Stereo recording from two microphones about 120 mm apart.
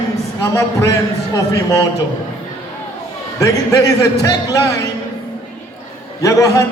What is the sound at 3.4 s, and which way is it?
A man's voice, 25° left (ahead or behind).